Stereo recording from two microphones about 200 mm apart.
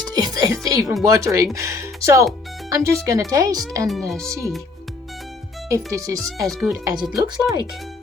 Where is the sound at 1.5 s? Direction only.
15° right (ahead or behind).